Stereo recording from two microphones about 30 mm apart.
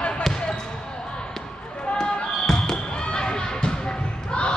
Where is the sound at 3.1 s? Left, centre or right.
Left.